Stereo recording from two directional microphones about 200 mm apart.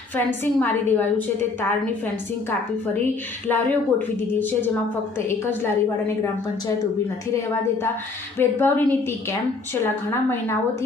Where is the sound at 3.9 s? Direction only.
10° left (ahead or behind).